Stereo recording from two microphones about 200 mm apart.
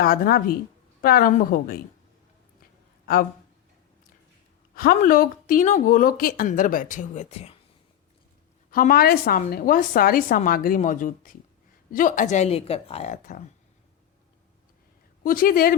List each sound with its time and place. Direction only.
0.0 s speech: 45° left (ahead or behind)
4.7 s speech: 45° left (ahead or behind)
8.7 s a woman's voice: 45° left (ahead or behind)
15.2 s speech: 45° left (ahead or behind)